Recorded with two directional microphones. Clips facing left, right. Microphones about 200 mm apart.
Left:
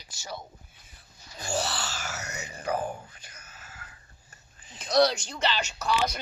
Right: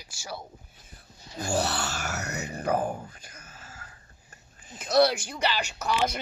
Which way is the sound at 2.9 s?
45° right (ahead or behind).